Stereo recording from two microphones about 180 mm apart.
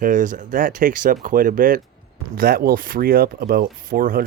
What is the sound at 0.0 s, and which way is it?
Speech, 45° right (ahead or behind).